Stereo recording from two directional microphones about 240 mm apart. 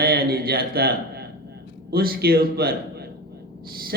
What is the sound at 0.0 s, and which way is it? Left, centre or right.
A man's voice, right.